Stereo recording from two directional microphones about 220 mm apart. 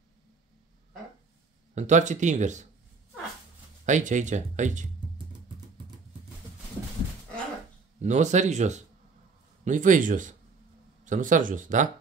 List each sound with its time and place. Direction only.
1.8 s speech: 35° right (ahead or behind)
3.8 s speech: 35° right (ahead or behind)
8.0 s speech: 30° right (ahead or behind)